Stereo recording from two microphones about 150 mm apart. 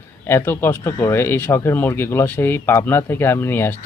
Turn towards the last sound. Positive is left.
turn(degrees=15)  # may be behind; listen again after turning